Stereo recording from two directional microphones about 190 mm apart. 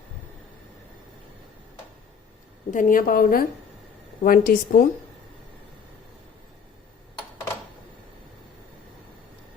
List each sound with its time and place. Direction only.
2.6 s a woman's voice: 45° left (ahead or behind)